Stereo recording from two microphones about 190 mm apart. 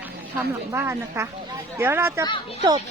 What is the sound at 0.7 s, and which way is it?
A woman's voice, 15° right (ahead or behind).